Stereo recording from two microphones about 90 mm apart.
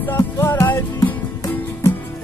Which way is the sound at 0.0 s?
25° left (ahead or behind).